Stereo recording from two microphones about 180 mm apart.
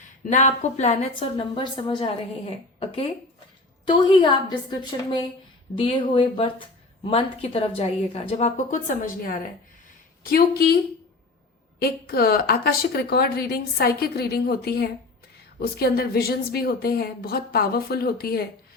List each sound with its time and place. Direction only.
0.3 s a woman's voice: 40° left (ahead or behind); by 10.8 s 60° left (ahead or behind)
11.8 s a woman's voice: 60° left (ahead or behind)